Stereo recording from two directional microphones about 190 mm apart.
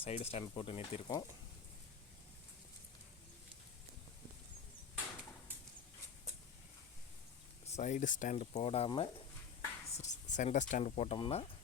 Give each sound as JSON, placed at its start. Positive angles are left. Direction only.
{"t": 0.0, "sound": "speech", "side_deg": 30}
{"t": 7.7, "sound": "speech", "side_deg": 40}